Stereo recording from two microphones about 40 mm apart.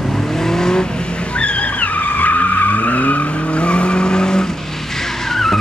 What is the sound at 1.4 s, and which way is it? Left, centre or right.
Vehicle, left.